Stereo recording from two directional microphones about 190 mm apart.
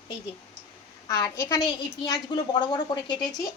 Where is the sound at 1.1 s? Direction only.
15° left (ahead or behind).